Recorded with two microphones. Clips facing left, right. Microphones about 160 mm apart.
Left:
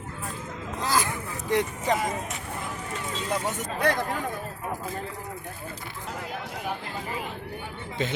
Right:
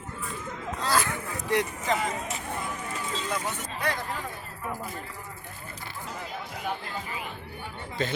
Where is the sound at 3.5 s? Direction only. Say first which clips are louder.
Left 5 dB; 45° left (ahead or behind).